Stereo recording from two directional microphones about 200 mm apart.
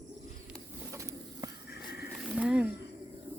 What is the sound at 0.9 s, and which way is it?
Bird, 15° right (ahead or behind).